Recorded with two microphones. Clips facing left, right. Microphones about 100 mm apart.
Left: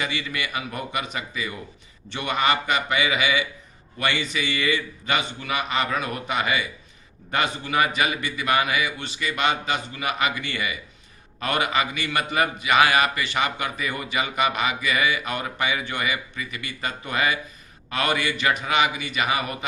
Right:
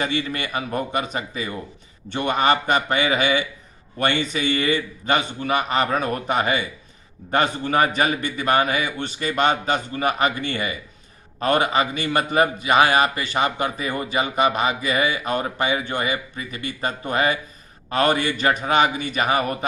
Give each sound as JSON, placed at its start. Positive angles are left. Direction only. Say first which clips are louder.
{"t": 0.0, "sound": "a man's voice", "louder": "right 4 dB", "side_deg": -40}